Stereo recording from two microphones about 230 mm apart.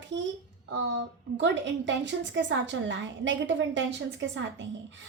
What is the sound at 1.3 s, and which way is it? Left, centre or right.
A woman's voice, right.